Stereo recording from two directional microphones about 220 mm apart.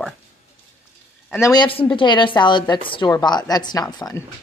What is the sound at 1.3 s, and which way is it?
A woman's voice, 15° left (ahead or behind).